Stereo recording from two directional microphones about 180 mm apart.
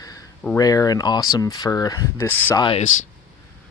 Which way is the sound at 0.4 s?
15° left (ahead or behind).